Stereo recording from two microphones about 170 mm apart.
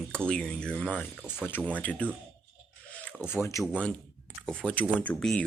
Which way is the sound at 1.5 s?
10° left (ahead or behind).